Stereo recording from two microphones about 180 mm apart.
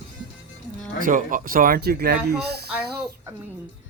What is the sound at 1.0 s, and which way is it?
Speech, 50° right (ahead or behind).